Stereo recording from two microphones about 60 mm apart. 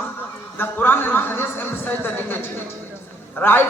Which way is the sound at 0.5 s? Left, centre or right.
Left.